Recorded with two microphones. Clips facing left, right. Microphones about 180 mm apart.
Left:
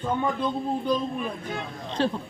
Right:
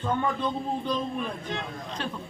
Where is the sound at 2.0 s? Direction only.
30° left (ahead or behind).